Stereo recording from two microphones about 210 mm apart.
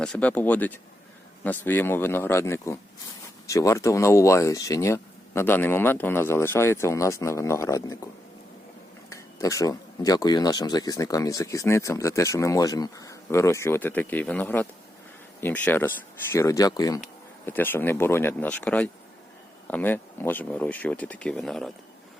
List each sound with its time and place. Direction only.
0.0 s speech: 5° left (ahead or behind)